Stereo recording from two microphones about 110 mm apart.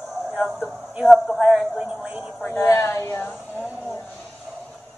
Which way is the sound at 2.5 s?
20° left (ahead or behind).